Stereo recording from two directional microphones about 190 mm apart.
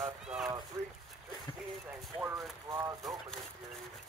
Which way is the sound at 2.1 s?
10° right (ahead or behind).